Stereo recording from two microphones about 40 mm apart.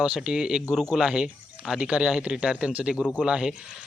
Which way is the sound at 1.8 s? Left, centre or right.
Right.